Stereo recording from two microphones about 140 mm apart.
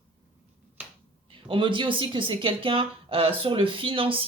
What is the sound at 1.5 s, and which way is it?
Speech, 35° right (ahead or behind).